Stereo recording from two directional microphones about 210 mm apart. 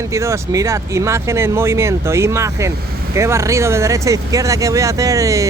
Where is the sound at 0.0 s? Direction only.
15° right (ahead or behind).